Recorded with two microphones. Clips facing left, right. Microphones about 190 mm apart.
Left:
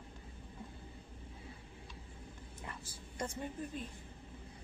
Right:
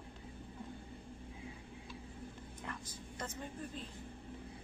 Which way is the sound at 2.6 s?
10° left (ahead or behind).